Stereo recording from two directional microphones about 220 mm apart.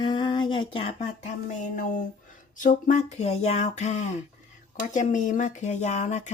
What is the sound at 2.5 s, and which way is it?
Speech, 35° left (ahead or behind).